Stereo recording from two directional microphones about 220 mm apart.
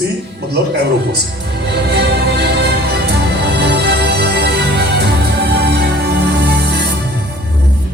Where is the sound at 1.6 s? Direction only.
50° right (ahead or behind).